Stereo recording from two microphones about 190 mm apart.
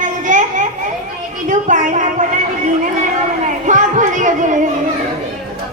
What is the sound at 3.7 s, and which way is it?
Speech, 40° right (ahead or behind).